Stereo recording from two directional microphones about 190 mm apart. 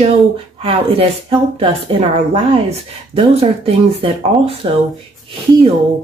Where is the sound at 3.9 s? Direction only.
30° right (ahead or behind).